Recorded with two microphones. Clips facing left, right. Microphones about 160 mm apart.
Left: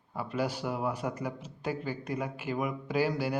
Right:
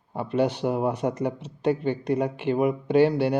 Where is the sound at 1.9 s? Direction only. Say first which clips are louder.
Right 10 dB; 75° right (ahead or behind).